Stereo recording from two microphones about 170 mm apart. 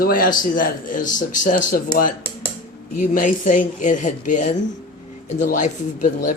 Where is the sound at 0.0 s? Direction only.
55° left (ahead or behind).